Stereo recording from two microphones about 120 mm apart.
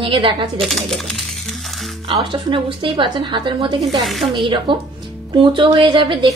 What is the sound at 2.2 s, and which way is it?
A woman's voice, 45° right (ahead or behind).